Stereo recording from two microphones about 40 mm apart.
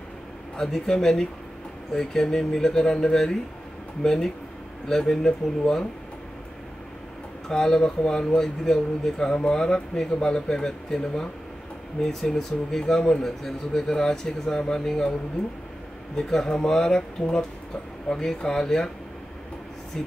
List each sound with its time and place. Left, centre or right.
0.6 s speech: centre
7.4 s speech: centre
16.2 s speech: centre